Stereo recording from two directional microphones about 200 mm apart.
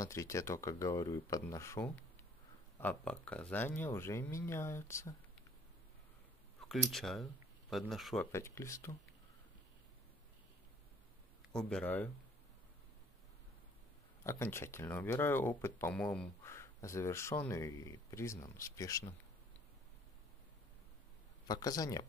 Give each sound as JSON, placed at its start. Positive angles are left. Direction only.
{"t": 0.0, "sound": "speech", "side_deg": 15}
{"t": 6.7, "sound": "speech", "side_deg": 0}
{"t": 8.3, "sound": "speech", "side_deg": 15}
{"t": 11.5, "sound": "speech", "side_deg": 5}
{"t": 14.2, "sound": "speech", "side_deg": 10}
{"t": 21.5, "sound": "speech", "side_deg": 20}